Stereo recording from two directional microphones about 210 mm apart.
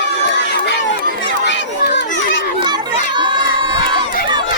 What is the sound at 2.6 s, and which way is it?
Chatter, 20° right (ahead or behind).